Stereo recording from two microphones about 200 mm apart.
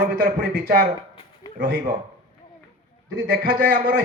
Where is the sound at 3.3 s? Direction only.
45° right (ahead or behind).